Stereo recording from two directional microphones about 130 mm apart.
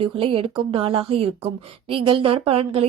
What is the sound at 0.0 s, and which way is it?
A woman's voice, 45° right (ahead or behind).